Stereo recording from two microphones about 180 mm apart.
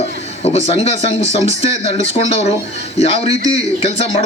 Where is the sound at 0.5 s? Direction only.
35° left (ahead or behind).